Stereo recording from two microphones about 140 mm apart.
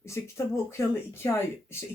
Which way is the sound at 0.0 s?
20° left (ahead or behind).